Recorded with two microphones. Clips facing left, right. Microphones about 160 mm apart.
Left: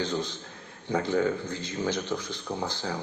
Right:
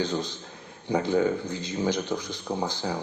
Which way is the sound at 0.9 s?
15° right (ahead or behind).